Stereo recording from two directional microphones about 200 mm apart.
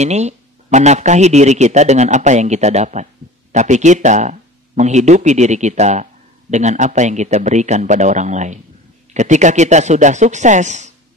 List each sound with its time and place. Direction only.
0.0 s speech: 35° right (ahead or behind)